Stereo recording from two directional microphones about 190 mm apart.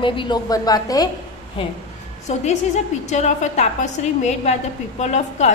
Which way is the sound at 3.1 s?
35° left (ahead or behind).